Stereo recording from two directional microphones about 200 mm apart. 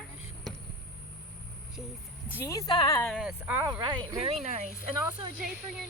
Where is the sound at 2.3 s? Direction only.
15° left (ahead or behind).